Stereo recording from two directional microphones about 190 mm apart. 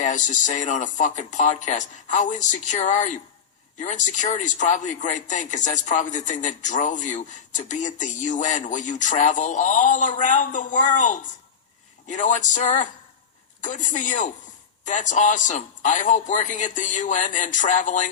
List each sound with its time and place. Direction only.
0.0 s a man's voice: 40° left (ahead or behind)